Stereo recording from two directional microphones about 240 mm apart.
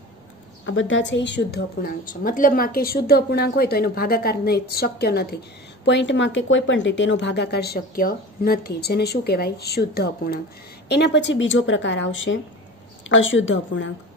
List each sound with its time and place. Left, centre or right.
0.7 s a woman's voice: left